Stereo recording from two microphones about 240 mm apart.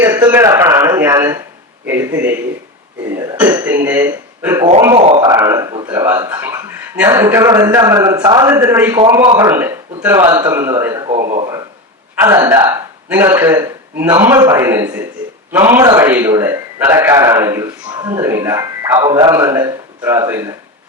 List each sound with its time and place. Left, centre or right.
0.0 s a man's voice: centre
9.2 s a man's voice: right
9.5 s a man's voice: centre
11.2 s a man's voice: right
12.2 s a man's voice: centre